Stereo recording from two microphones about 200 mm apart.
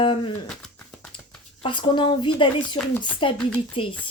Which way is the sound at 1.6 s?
25° left (ahead or behind).